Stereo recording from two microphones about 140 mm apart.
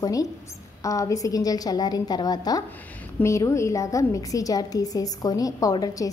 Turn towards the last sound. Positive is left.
turn(degrees=25)  # may be behind; listen again after turning